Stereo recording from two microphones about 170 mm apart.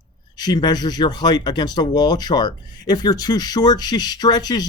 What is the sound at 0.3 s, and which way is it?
Speech, 25° left (ahead or behind).